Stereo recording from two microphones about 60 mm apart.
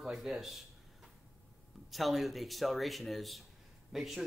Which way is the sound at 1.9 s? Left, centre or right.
Centre.